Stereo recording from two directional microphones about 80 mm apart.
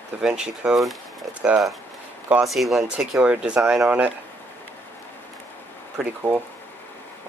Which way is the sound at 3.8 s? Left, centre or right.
Centre.